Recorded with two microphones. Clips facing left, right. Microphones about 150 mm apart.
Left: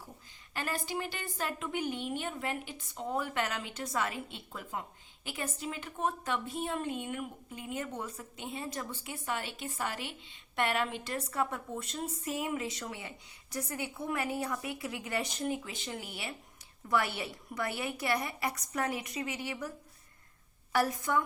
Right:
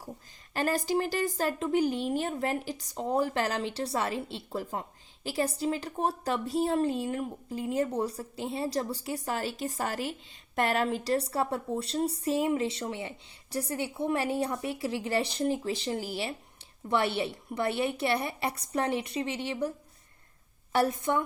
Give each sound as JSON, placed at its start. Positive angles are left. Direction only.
{"t": 0.5, "sound": "a woman's voice", "side_deg": -40}
{"t": 20.7, "sound": "a woman's voice", "side_deg": -25}